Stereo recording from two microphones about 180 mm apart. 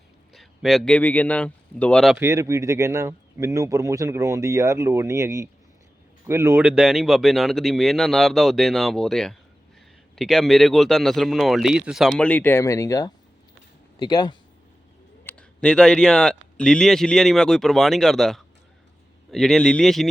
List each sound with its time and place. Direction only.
0.3 s a man's voice: centre (ahead or behind)
2.1 s speech: 15° right (ahead or behind); by 14.3 s 25° left (ahead or behind)
15.2 s speech: 10° left (ahead or behind)